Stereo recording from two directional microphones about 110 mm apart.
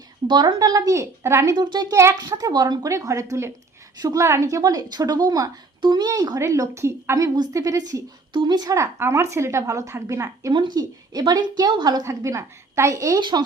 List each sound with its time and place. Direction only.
0.3 s speech: 40° right (ahead or behind)
1.5 s speech: 40° right (ahead or behind)
7.3 s speech: 35° right (ahead or behind)
10.5 s speech: 40° right (ahead or behind)